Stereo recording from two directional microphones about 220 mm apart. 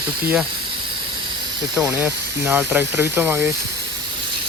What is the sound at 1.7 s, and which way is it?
Speech, 5° right (ahead or behind).